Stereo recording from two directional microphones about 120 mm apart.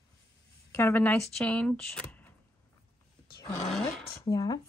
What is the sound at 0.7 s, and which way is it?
Speech, 15° left (ahead or behind).